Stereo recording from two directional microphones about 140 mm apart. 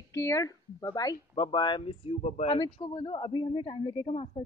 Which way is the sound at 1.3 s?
35° left (ahead or behind).